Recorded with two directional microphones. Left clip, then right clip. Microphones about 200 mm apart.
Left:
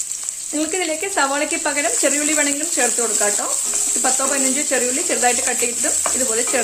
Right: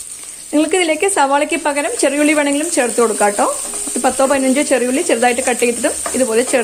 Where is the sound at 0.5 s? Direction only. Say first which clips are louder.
Right 8 dB; 35° right (ahead or behind).